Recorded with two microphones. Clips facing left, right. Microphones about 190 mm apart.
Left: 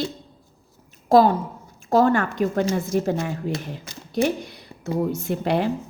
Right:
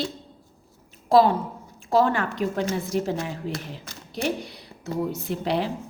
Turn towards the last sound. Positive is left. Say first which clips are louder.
# left 3 dB
turn(degrees=50)  # may be behind; listen again after turning